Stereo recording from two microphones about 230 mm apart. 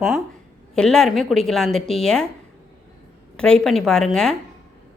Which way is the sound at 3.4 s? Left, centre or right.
Centre.